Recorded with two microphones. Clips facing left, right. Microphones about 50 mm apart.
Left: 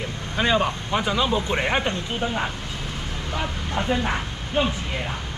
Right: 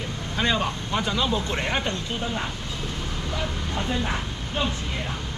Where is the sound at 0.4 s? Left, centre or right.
Centre.